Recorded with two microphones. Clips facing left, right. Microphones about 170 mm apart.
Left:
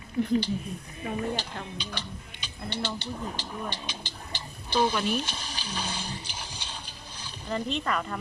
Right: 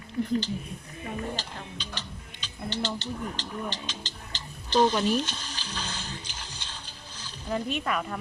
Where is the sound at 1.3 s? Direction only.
10° left (ahead or behind).